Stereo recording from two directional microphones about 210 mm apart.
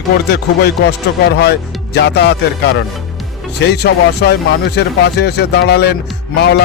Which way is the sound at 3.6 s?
50° left (ahead or behind).